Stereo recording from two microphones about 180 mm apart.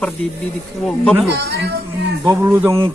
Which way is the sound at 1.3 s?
70° right (ahead or behind).